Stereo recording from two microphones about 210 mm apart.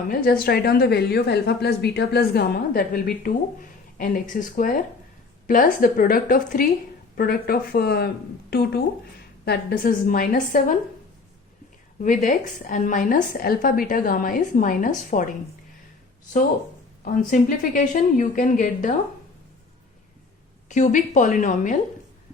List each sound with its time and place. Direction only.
0.1 s a woman's voice: 45° left (ahead or behind)
12.0 s a woman's voice: 40° left (ahead or behind)
17.0 s a woman's voice: 40° left (ahead or behind)
20.7 s a woman's voice: 35° left (ahead or behind)